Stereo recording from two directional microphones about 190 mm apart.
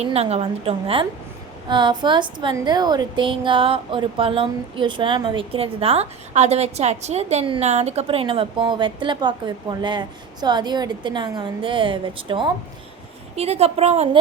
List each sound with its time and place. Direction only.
0.0 s a woman's voice: 35° right (ahead or behind)